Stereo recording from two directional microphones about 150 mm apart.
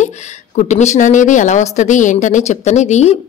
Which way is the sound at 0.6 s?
50° left (ahead or behind).